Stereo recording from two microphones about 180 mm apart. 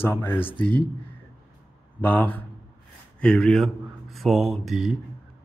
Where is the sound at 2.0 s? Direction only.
10° left (ahead or behind).